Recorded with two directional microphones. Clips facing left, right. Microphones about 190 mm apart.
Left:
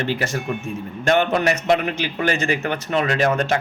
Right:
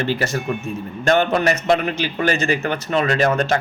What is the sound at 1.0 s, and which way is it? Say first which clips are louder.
A man's voice: right 1 dB; 15° left (ahead or behind).